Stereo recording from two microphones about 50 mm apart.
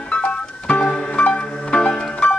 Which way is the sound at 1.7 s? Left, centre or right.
Centre.